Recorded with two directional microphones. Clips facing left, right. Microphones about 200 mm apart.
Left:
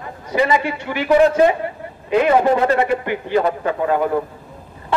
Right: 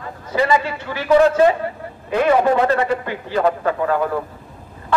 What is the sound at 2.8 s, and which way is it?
A man's voice, 20° left (ahead or behind).